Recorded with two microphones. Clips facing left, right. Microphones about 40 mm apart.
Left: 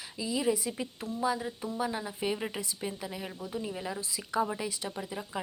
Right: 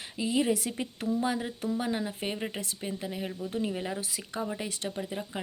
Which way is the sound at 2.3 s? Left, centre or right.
Centre.